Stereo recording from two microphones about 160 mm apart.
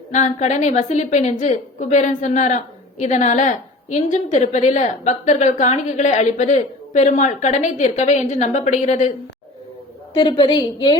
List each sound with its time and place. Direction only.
0.1 s a woman's voice: 45° left (ahead or behind)
10.2 s a woman's voice: 35° left (ahead or behind)